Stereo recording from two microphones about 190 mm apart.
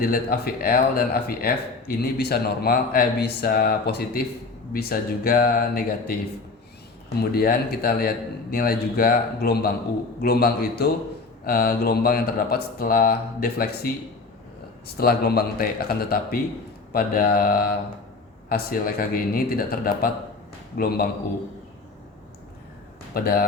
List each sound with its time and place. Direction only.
0.0 s a man's voice: 50° left (ahead or behind)
7.2 s a man's voice: 55° left (ahead or behind)
14.9 s a man's voice: 55° left (ahead or behind)
23.1 s a man's voice: 50° left (ahead or behind)